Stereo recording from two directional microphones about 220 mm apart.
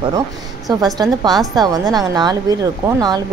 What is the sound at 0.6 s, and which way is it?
A woman's voice, 15° right (ahead or behind).